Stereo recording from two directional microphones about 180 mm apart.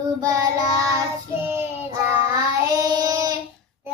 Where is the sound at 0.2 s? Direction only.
20° right (ahead or behind).